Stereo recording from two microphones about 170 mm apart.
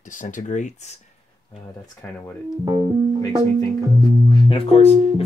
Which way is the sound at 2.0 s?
15° left (ahead or behind).